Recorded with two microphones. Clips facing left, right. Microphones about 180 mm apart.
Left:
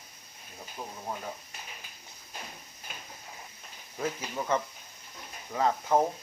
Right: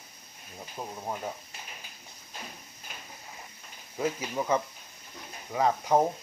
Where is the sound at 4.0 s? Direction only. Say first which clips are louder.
Right 3 dB; 10° right (ahead or behind).